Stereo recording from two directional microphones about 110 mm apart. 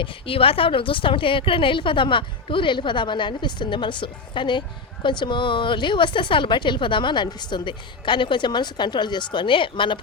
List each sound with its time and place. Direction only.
0.0 s a woman's voice: 55° left (ahead or behind)